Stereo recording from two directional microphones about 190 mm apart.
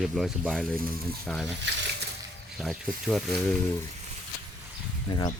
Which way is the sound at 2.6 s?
Centre (ahead or behind).